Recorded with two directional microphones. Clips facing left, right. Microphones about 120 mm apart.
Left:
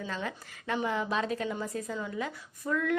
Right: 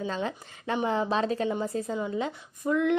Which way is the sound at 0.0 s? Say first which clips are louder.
Right 5 dB; 30° right (ahead or behind).